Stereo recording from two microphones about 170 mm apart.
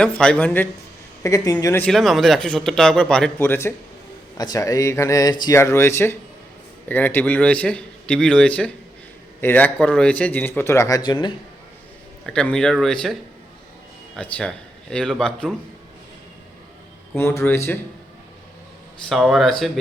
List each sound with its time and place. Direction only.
0.0 s a man's voice: 5° left (ahead or behind)
1.9 s a man's voice: centre (ahead or behind); by 11.3 s 25° left (ahead or behind)
12.2 s speech: 5° left (ahead or behind)
14.2 s speech: 10° left (ahead or behind)
17.2 s a man's voice: 15° left (ahead or behind)
19.0 s speech: centre (ahead or behind)